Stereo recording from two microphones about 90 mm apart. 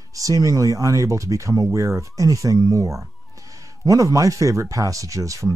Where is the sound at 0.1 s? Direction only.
40° right (ahead or behind).